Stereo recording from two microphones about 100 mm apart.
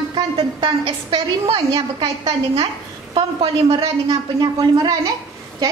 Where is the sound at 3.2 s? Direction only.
60° right (ahead or behind).